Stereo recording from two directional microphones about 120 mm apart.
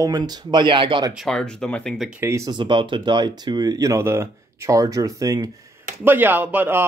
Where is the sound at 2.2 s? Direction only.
20° right (ahead or behind).